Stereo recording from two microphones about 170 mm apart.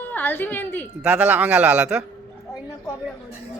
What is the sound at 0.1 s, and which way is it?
Speech, 10° left (ahead or behind).